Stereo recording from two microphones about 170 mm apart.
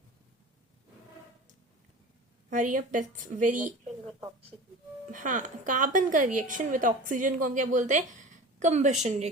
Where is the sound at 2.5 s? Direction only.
50° right (ahead or behind).